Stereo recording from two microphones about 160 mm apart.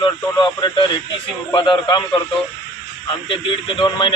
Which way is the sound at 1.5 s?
30° left (ahead or behind).